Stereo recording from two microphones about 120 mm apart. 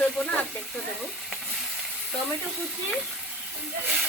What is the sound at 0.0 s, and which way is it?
Frying, 5° left (ahead or behind).